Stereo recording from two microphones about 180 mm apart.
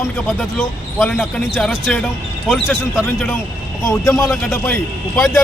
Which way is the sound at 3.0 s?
5° left (ahead or behind).